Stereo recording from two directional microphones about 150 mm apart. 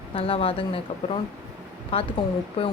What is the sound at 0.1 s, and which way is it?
Speech, 40° left (ahead or behind).